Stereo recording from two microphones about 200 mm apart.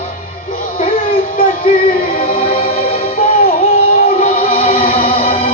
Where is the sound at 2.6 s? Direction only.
30° left (ahead or behind).